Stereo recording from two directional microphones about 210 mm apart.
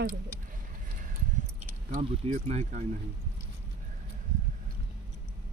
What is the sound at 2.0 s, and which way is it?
Speech, 35° right (ahead or behind).